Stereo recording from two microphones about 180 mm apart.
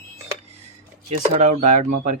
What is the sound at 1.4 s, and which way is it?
Speech, 40° right (ahead or behind).